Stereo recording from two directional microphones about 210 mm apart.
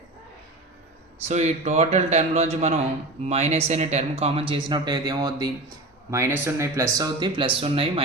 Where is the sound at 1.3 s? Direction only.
35° right (ahead or behind).